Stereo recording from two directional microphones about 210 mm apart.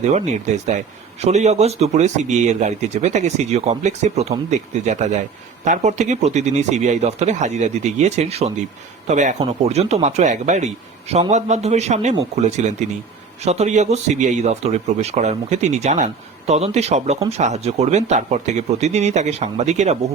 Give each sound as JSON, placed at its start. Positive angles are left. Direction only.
{"t": 0.0, "sound": "speech", "side_deg": -35}